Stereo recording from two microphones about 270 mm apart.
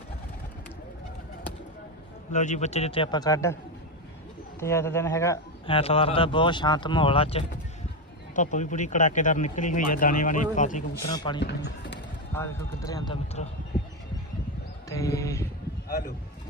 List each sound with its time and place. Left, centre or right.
2.3 s speech: left
4.6 s a man's voice: centre; by 10.8 s left
11.1 s a man's voice: centre
11.3 s speech: left
12.3 s a man's voice: centre
14.8 s a sound: centre